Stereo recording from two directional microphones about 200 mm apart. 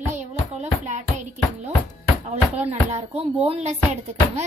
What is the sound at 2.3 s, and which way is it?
A woman's voice, 35° right (ahead or behind).